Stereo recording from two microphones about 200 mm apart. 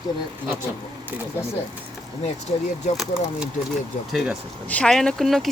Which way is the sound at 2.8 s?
35° left (ahead or behind).